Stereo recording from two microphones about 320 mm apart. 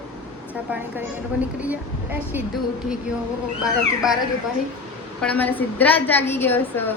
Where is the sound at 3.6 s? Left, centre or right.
Centre.